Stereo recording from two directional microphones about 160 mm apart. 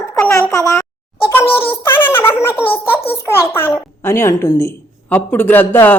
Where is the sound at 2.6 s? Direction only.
35° left (ahead or behind).